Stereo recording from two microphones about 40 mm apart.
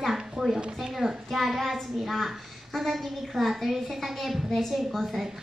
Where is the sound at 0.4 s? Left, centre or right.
Centre.